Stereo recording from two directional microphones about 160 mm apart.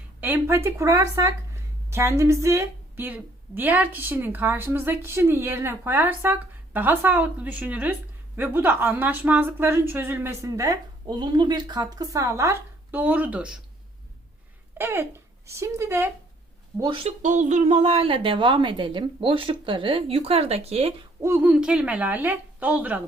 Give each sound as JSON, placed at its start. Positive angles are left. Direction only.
{"t": 0.2, "sound": "a woman's voice", "side_deg": -10}
{"t": 14.8, "sound": "a woman's voice", "side_deg": -15}
{"t": 16.8, "sound": "a woman's voice", "side_deg": -35}
{"t": 17.2, "sound": "a woman's voice", "side_deg": -50}
{"t": 21.2, "sound": "a woman's voice", "side_deg": -15}